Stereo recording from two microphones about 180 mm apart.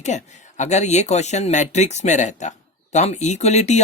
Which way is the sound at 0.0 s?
40° left (ahead or behind).